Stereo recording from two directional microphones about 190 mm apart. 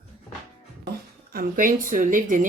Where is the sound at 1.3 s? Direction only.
45° right (ahead or behind).